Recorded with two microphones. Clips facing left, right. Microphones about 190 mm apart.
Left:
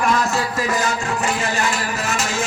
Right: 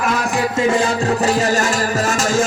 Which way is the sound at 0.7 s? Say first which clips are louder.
Right 5 dB; 35° right (ahead or behind).